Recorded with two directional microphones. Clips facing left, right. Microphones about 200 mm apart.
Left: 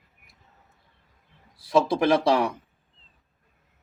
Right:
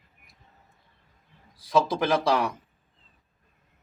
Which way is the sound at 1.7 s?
25° left (ahead or behind).